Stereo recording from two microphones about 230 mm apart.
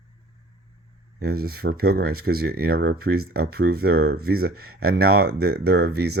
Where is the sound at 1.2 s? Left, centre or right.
Right.